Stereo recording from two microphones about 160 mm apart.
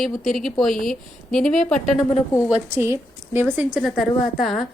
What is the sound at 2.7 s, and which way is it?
Speech, 15° right (ahead or behind).